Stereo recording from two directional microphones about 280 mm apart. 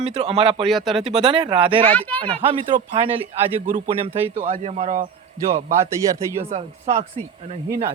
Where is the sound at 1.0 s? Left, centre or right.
Centre.